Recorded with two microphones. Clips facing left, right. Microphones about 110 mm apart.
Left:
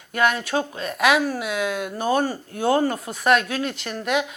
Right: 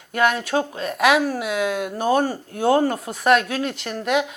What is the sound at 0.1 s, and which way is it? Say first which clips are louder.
Speech: right 2 dB; 55° right (ahead or behind).